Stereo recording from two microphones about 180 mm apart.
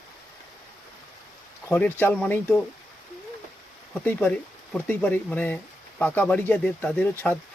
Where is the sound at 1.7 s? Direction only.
10° left (ahead or behind).